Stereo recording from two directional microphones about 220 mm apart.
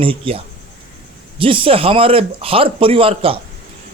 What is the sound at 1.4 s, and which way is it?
Speech, 25° right (ahead or behind).